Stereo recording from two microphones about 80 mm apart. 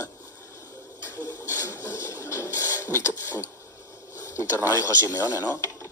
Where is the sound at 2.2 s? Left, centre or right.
Left.